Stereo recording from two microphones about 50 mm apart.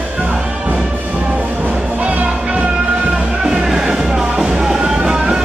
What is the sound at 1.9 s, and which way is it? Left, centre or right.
Music, right.